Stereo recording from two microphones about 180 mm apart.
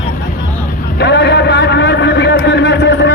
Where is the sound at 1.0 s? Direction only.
70° left (ahead or behind).